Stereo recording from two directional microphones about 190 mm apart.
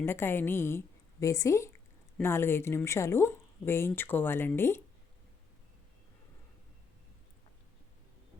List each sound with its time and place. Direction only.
0.0 s speech: 10° left (ahead or behind)